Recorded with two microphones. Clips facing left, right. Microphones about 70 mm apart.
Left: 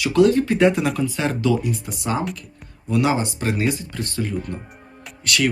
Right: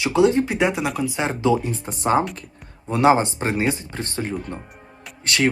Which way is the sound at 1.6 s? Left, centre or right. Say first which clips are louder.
Right 2 dB; right.